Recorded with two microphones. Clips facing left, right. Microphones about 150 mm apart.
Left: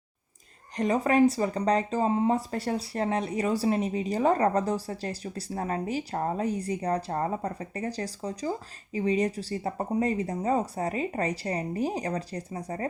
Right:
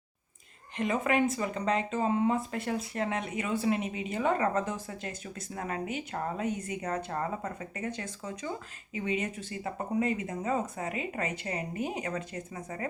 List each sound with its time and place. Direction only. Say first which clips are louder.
0.8 s speech: left 5 dB; 35° left (ahead or behind)